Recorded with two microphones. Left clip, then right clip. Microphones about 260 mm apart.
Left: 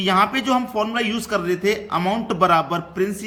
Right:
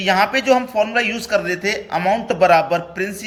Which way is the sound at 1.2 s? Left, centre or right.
Left.